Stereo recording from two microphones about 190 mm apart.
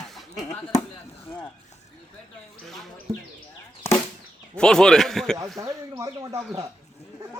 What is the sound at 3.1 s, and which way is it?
Speech, 30° right (ahead or behind).